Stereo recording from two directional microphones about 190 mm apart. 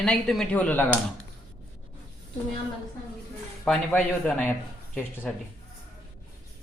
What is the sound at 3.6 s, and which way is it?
Speech, 5° left (ahead or behind).